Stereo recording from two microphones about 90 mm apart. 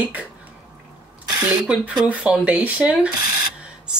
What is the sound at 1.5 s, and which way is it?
Speech, 15° right (ahead or behind).